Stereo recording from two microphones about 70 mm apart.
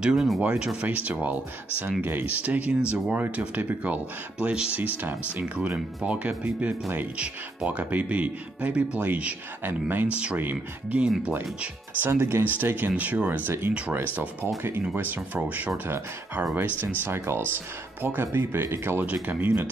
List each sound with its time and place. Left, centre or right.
0.0 s speech: centre
0.4 s speech: centre
12.1 s speech: right
12.5 s speech: right
15.0 s speech: right